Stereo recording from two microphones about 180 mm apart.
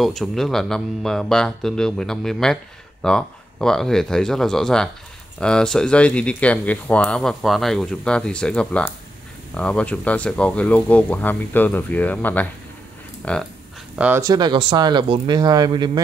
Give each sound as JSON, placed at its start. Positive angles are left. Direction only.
{"t": 0.0, "sound": "speech", "side_deg": 0}
{"t": 13.9, "sound": "speech", "side_deg": -10}
{"t": 14.2, "sound": "speech", "side_deg": -20}